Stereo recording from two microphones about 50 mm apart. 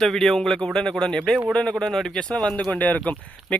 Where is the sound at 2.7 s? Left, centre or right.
Left.